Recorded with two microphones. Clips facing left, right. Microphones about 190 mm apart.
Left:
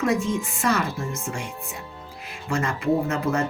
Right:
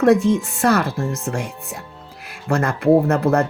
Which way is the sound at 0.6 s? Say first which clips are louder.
Right 5 dB; 60° right (ahead or behind).